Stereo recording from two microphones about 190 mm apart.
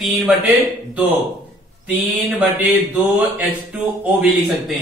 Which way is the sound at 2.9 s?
10° right (ahead or behind).